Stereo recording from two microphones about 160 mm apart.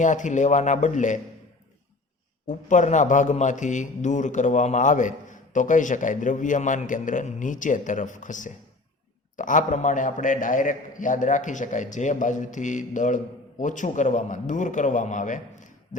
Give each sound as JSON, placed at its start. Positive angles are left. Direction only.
{"t": 0.0, "sound": "a man's voice", "side_deg": 50}
{"t": 2.5, "sound": "a man's voice", "side_deg": 50}